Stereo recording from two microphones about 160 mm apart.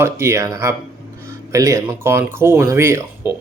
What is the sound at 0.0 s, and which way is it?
Speech, 15° right (ahead or behind).